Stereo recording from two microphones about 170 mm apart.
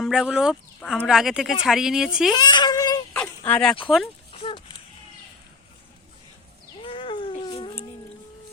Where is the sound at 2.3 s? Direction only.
25° left (ahead or behind).